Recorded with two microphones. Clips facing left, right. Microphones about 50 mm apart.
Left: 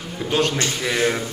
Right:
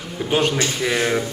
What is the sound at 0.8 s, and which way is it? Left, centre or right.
Speech, centre.